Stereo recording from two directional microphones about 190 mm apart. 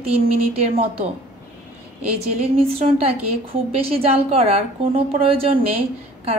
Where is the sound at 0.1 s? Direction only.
30° right (ahead or behind).